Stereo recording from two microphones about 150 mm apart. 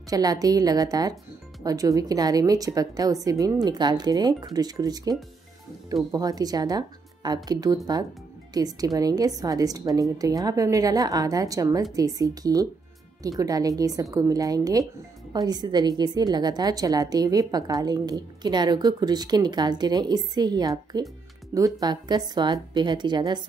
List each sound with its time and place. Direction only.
0.1 s a woman's voice: 25° right (ahead or behind)
6.1 s a woman's voice: 25° right (ahead or behind)